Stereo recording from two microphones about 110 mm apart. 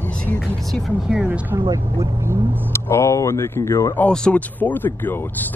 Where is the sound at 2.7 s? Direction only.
25° left (ahead or behind).